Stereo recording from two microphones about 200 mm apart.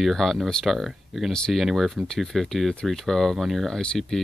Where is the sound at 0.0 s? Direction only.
Centre (ahead or behind).